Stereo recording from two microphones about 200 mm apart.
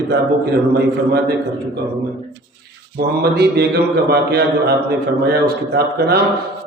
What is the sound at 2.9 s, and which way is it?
Speech, 55° right (ahead or behind).